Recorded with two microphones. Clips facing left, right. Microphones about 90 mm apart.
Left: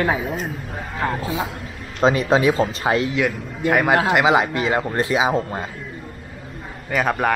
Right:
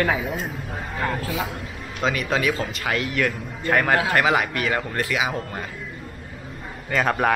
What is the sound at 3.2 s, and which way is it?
A man's voice, 10° left (ahead or behind).